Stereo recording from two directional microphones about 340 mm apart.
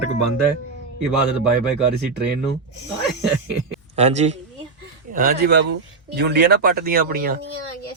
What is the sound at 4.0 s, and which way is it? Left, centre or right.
Speech, centre.